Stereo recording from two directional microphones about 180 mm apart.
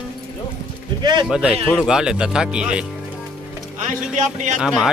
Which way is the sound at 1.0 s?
25° right (ahead or behind).